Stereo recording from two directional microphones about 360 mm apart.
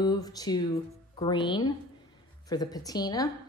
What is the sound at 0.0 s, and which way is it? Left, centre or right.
Speech, centre.